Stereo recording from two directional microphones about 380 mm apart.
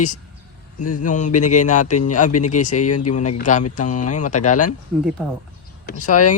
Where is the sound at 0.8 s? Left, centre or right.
Left.